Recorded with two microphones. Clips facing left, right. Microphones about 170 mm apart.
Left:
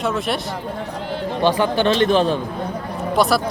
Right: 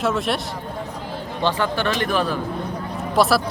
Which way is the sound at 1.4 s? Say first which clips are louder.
Left 4 dB; 15° left (ahead or behind).